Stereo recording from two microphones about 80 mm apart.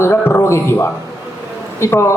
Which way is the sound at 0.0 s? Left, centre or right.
Left.